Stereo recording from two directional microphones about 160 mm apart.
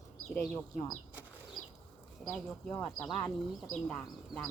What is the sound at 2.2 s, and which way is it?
Speech, 10° left (ahead or behind).